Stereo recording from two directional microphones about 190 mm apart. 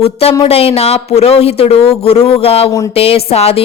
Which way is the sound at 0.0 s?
30° left (ahead or behind).